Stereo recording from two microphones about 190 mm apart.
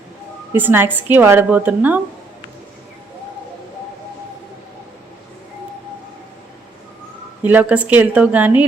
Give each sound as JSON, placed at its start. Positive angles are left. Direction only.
{"t": 0.5, "sound": "speech", "side_deg": -10}
{"t": 7.4, "sound": "speech", "side_deg": -10}